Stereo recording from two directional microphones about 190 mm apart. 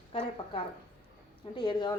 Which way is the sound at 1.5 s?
25° left (ahead or behind).